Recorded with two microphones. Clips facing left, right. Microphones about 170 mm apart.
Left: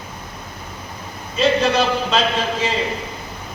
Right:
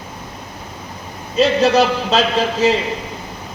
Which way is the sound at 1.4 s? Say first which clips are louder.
Right 4 dB; 40° right (ahead or behind).